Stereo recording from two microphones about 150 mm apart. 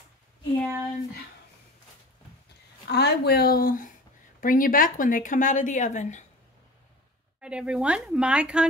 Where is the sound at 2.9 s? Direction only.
90° left; by 6.2 s 50° left (ahead or behind).